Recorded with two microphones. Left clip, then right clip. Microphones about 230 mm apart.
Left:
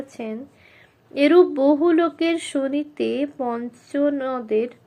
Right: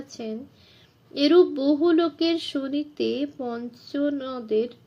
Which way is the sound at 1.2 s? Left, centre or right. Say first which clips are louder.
Left 4 dB; centre.